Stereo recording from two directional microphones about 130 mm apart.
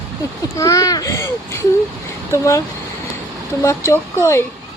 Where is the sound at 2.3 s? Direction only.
25° left (ahead or behind).